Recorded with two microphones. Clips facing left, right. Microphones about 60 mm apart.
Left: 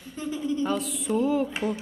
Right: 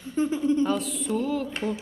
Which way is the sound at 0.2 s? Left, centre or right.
Right.